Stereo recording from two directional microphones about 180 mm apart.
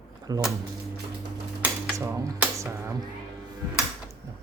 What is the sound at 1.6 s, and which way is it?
Cutlery, 15° right (ahead or behind).